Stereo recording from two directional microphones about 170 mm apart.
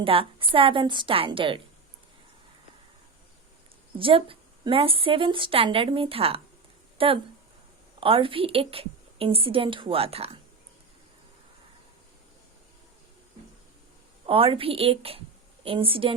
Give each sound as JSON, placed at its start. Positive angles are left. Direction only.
{"t": 0.0, "sound": "a woman's voice", "side_deg": -30}
{"t": 3.9, "sound": "a woman's voice", "side_deg": -30}
{"t": 14.3, "sound": "a woman's voice", "side_deg": -30}